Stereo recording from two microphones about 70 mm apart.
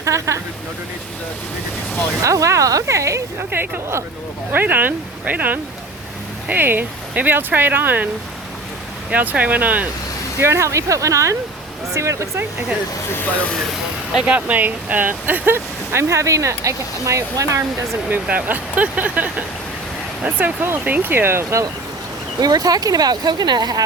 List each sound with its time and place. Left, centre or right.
0.0 s speech: right
2.2 s speech: right
3.5 s speech: right
9.0 s speech: right
10.4 s speech: right
13.2 s speech: left
14.3 s speech: right
18.1 s speech: right
22.4 s speech: right